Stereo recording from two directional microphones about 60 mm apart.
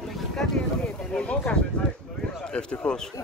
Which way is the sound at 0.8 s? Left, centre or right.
Left.